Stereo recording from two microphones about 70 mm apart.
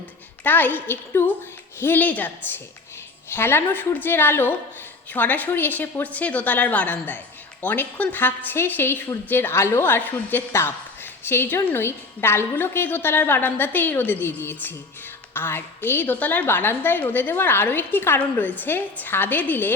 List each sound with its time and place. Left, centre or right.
0.4 s a woman's voice: left
3.3 s a woman's voice: left